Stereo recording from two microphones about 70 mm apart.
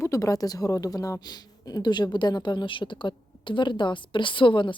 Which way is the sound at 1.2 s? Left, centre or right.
Left.